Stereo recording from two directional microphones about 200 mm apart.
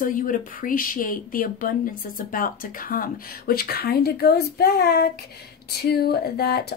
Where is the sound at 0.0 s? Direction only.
40° left (ahead or behind).